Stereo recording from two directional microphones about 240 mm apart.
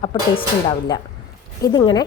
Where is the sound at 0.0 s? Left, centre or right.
Centre.